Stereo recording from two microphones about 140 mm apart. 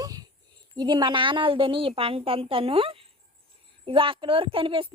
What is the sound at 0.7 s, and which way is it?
A woman's voice, 30° right (ahead or behind).